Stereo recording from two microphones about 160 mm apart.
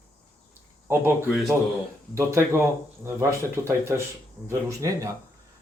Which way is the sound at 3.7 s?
15° right (ahead or behind).